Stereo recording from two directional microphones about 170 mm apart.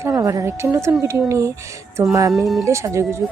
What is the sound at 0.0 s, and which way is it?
Speech, 20° right (ahead or behind).